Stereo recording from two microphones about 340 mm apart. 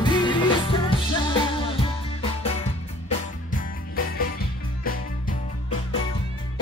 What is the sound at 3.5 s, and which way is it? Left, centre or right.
Music, left.